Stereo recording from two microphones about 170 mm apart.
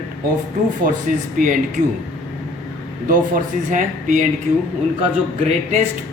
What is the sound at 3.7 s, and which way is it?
Speech, 50° right (ahead or behind).